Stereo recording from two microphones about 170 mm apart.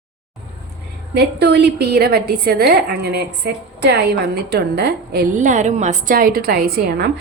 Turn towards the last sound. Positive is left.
turn(degrees=-65)  # may be behind; listen again after turning